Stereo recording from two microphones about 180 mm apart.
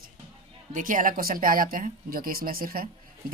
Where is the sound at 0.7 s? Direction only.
45° right (ahead or behind).